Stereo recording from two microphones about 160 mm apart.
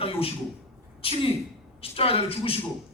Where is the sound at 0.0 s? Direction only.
35° left (ahead or behind).